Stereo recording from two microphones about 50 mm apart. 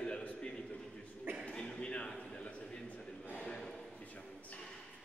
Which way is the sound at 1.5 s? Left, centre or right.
Left.